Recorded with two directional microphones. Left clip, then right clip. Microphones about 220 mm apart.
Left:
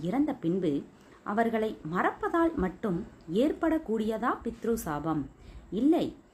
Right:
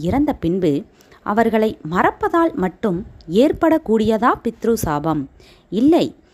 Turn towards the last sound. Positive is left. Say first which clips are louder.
# right 11 dB
turn(degrees=-45)  # may be behind; listen again after turning